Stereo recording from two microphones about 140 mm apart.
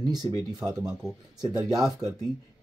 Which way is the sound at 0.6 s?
5° right (ahead or behind).